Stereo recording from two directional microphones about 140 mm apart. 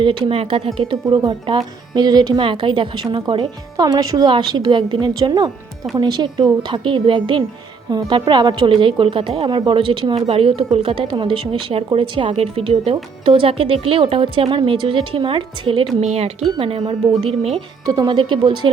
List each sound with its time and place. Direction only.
0.0 s speech: 35° right (ahead or behind)
16.0 s speech: 50° right (ahead or behind)
17.8 s speech: 30° right (ahead or behind)